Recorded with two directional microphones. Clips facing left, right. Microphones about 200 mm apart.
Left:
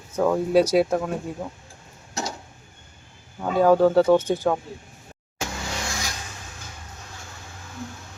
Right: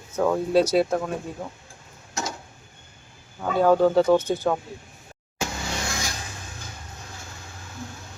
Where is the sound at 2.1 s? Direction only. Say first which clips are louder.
Left 1 dB; 35° left (ahead or behind).